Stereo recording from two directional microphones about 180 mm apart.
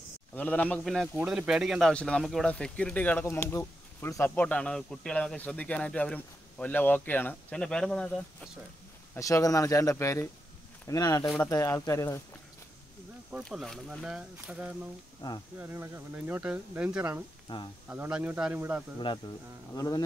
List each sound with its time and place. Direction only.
0.4 s speech: 5° left (ahead or behind)
9.1 s a man's voice: 20° left (ahead or behind)
13.3 s speech: centre (ahead or behind)
15.2 s a man's voice: 25° left (ahead or behind)
15.6 s speech: 15° right (ahead or behind)
18.9 s a man's voice: 25° left (ahead or behind)